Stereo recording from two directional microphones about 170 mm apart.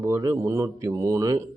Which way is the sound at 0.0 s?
15° right (ahead or behind).